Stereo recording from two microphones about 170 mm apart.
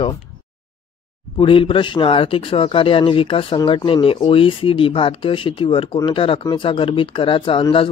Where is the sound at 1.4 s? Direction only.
30° left (ahead or behind).